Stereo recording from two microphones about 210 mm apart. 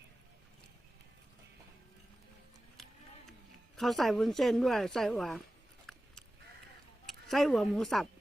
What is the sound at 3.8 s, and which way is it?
Speech, centre (ahead or behind).